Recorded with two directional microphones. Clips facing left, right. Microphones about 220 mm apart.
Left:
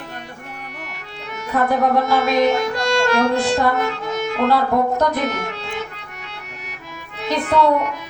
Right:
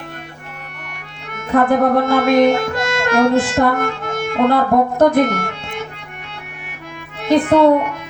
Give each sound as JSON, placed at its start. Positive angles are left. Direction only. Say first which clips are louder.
{"t": 1.3, "sound": "music", "louder": "right 5 dB", "side_deg": -50}
{"t": 7.2, "sound": "a child's voice", "louder": "right 6 dB", "side_deg": -50}